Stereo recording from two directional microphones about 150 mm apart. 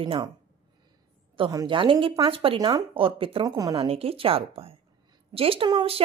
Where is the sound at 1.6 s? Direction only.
35° right (ahead or behind).